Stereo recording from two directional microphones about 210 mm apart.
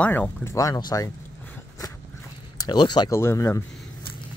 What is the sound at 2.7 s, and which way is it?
Speech, 20° left (ahead or behind).